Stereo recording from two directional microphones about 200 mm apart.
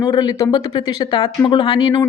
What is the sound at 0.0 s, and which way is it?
A woman's voice, 20° left (ahead or behind).